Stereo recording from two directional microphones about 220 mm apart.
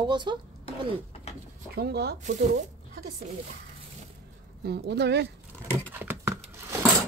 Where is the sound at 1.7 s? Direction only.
45° right (ahead or behind).